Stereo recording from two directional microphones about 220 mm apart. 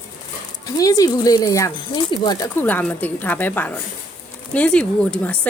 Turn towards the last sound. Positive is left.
turn(degrees=5)  # may be behind; listen again after turning